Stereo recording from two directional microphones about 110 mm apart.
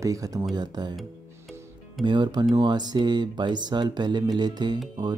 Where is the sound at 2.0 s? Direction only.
45° right (ahead or behind).